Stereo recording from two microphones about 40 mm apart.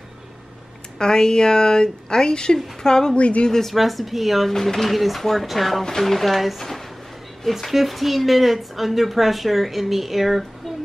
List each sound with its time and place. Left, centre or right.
0.9 s a woman's voice: centre
3.2 s speech: left
3.4 s a woman's voice: centre
3.7 s speech: centre
4.5 s a woman's voice: centre
4.8 s a woman's voice: centre